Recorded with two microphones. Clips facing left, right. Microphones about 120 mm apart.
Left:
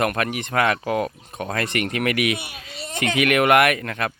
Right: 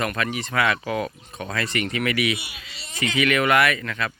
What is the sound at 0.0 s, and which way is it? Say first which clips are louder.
Speech: left 3 dB; 55° left (ahead or behind).